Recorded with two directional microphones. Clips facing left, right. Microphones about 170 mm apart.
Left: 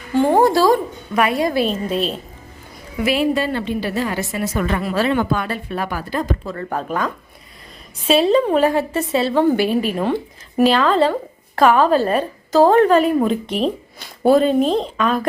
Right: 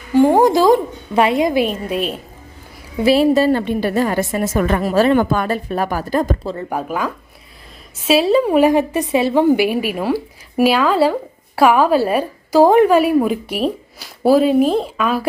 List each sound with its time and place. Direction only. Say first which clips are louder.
0.1 s speech: right 3 dB; 15° right (ahead or behind)
3.0 s a woman's voice: right 5 dB; 35° right (ahead or behind)
6.4 s speech: right 3 dB; 25° right (ahead or behind)
6.7 s speech: left 1 dB; 10° right (ahead or behind)